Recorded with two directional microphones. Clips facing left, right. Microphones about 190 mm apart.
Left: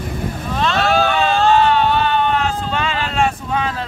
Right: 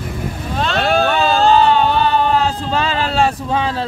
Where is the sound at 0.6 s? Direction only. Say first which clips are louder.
Right 1 dB; 35° right (ahead or behind).